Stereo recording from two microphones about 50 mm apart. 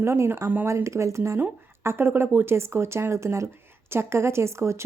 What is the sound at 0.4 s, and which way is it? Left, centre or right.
Speech, right.